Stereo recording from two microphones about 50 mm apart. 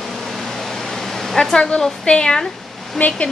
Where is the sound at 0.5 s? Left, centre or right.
Centre.